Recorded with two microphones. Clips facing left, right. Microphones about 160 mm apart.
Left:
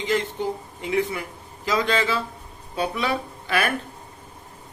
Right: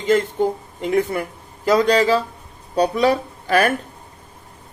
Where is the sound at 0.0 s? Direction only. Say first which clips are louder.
Right 7 dB; 45° right (ahead or behind).